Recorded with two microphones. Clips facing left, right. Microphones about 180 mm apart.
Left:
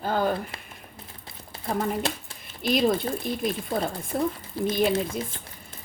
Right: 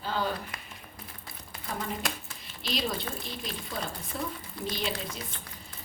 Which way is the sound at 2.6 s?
50° left (ahead or behind).